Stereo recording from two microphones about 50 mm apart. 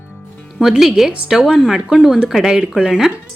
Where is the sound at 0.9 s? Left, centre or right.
Centre.